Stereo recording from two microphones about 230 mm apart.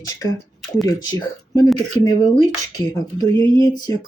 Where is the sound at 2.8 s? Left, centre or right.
Centre.